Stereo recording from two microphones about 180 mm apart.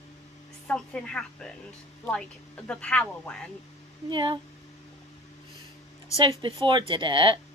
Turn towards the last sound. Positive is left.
turn(degrees=-30)  # may be behind; listen again after turning